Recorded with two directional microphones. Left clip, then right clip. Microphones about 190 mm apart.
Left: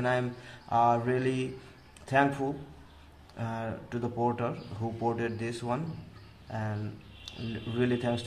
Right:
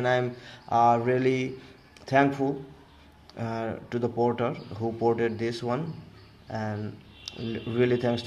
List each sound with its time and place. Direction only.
0.0 s speech: 25° right (ahead or behind)